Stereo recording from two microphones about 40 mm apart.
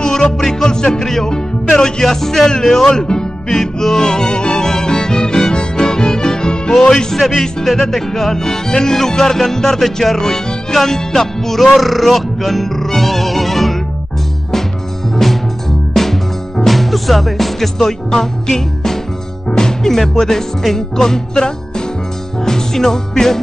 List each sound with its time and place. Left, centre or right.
0.0 s music: centre
3.0 s speech: centre
3.4 s music: centre
10.1 s speech: centre
15.9 s music: centre